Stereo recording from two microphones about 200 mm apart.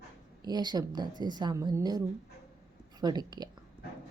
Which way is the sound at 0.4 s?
20° right (ahead or behind).